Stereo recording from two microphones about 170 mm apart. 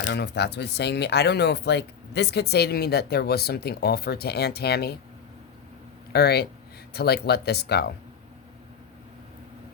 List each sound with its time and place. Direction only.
0.1 s speech: 85° left; by 4.9 s 70° left (ahead or behind)
6.1 s speech: 70° left (ahead or behind)